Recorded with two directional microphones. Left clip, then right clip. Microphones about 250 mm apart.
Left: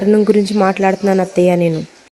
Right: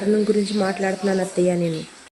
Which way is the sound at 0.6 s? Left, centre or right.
Left.